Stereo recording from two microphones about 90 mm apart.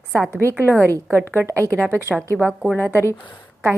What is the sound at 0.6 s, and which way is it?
Speech, 20° left (ahead or behind).